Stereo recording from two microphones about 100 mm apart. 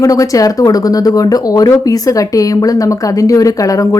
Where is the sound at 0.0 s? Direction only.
35° left (ahead or behind).